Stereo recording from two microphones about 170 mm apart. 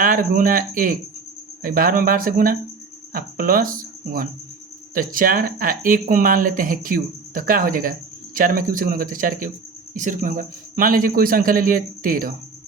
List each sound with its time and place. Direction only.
0.0 s speech: 55° right (ahead or behind)